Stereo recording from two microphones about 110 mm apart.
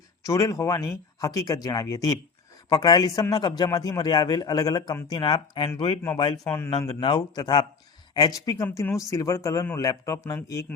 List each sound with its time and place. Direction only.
0.3 s a man's voice: 30° left (ahead or behind); by 5.7 s 50° left (ahead or behind)
6.4 s speech: 20° left (ahead or behind)
6.7 s a man's voice: 40° left (ahead or behind)